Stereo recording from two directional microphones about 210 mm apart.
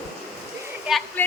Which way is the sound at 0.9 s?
Centre (ahead or behind).